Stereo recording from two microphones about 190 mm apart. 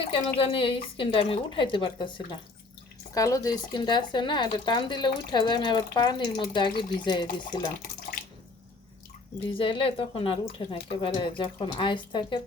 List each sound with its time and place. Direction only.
0.1 s speech: 30° left (ahead or behind)
9.5 s speech: 25° left (ahead or behind)